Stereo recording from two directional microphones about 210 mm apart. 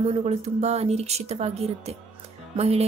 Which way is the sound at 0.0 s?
30° right (ahead or behind).